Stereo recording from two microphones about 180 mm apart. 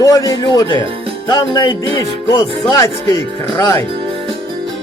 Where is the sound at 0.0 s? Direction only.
20° left (ahead or behind).